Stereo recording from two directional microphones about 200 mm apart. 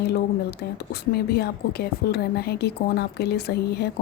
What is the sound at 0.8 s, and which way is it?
A woman's voice, 55° left (ahead or behind).